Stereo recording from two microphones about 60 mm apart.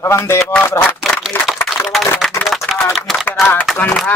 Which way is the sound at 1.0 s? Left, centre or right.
Centre.